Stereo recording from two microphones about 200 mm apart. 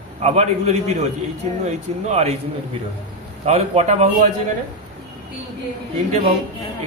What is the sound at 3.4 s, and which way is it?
Speech, 35° right (ahead or behind).